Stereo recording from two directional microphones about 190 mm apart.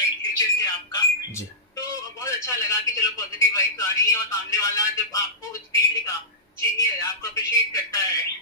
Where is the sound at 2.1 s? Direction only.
15° left (ahead or behind).